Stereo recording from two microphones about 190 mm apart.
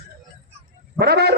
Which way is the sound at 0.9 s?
55° right (ahead or behind).